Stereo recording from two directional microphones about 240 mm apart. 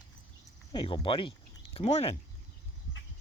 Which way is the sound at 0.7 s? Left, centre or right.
Centre.